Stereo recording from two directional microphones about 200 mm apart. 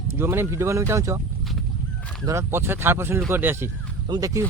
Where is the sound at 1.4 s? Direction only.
Centre (ahead or behind).